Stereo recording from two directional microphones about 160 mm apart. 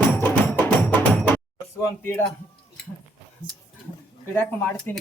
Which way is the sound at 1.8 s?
10° left (ahead or behind).